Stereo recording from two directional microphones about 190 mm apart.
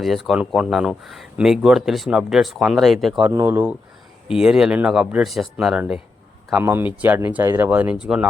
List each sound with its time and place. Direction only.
0.0 s speech: centre (ahead or behind)
6.5 s speech: 10° right (ahead or behind)